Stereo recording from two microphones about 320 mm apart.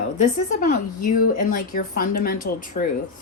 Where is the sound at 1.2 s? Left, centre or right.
Left.